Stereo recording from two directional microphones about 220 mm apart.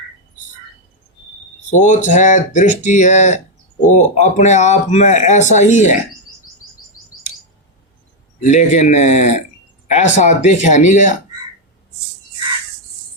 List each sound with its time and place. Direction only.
1.7 s speech: 35° left (ahead or behind)
8.4 s speech: 35° left (ahead or behind)